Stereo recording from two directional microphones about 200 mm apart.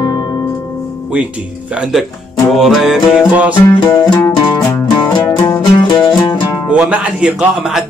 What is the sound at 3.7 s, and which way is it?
Music, 25° left (ahead or behind).